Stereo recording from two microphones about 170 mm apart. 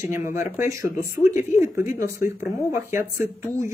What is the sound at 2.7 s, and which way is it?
Speech, 15° right (ahead or behind).